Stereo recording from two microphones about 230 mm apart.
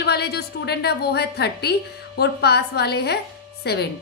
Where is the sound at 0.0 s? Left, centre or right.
Left.